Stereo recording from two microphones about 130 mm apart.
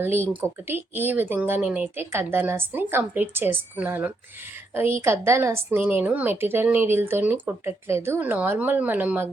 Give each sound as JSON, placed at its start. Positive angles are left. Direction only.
{"t": 0.0, "sound": "a woman's voice", "side_deg": -15}